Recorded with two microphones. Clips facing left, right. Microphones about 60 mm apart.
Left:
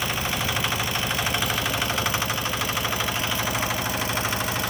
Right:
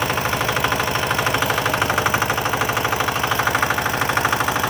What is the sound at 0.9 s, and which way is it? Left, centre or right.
Vehicle, right.